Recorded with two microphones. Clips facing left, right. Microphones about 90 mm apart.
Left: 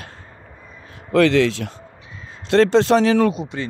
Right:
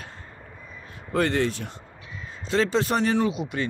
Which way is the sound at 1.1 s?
90° left.